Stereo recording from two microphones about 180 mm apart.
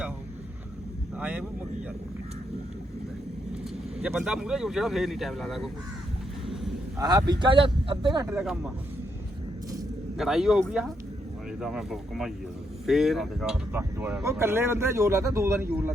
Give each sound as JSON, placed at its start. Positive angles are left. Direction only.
{"t": 1.2, "sound": "speech", "side_deg": -5}
{"t": 4.0, "sound": "speech", "side_deg": -5}
{"t": 7.0, "sound": "speech", "side_deg": -20}
{"t": 8.3, "sound": "speech", "side_deg": -5}
{"t": 10.2, "sound": "speech", "side_deg": 0}